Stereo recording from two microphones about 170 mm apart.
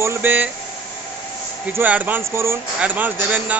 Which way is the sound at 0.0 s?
15° right (ahead or behind).